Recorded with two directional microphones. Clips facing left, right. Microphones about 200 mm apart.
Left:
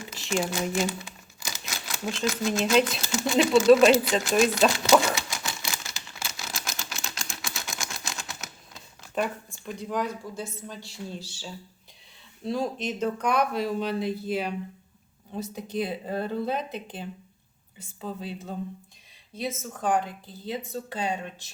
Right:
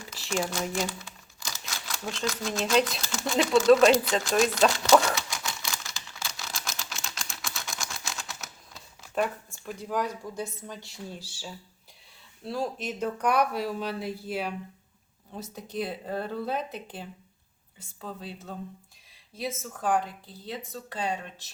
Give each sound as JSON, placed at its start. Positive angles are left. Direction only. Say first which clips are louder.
{"t": 0.1, "sound": "a sound", "louder": "left 2 dB", "side_deg": 20}
{"t": 0.5, "sound": "crumpling", "louder": "left 3 dB", "side_deg": 5}
{"t": 1.6, "sound": "typewriter", "louder": "left 3 dB", "side_deg": 10}
{"t": 2.4, "sound": "speech", "louder": "left 2 dB", "side_deg": 5}
{"t": 4.2, "sound": "typewriter", "louder": "left 2 dB", "side_deg": 5}
{"t": 9.6, "sound": "speech", "louder": "left 1 dB", "side_deg": -5}